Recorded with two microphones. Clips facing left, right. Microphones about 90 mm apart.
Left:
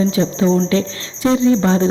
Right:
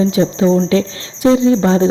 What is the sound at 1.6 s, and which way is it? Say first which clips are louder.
Cricket: right 3 dB; 20° right (ahead or behind).